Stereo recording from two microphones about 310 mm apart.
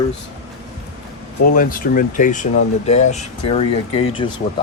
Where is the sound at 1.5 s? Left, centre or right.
Left.